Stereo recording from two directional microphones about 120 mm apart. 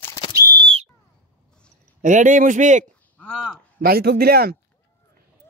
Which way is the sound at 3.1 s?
10° left (ahead or behind).